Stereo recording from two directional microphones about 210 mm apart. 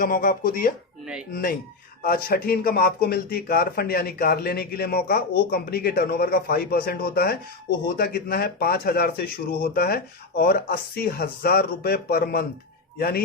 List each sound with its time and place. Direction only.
0.0 s speech: 40° left (ahead or behind)